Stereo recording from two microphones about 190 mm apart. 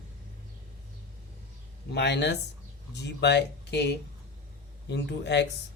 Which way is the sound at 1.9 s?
60° left (ahead or behind).